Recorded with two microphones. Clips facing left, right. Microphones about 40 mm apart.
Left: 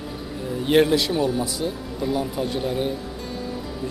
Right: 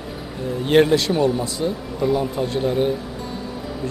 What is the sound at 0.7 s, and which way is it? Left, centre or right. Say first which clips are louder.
Speech: right 2 dB; centre.